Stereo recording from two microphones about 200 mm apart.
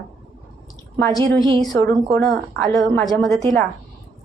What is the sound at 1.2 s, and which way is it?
Speech, 25° right (ahead or behind).